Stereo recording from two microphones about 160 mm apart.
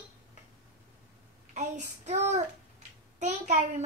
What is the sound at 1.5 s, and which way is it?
Child singing, 45° right (ahead or behind).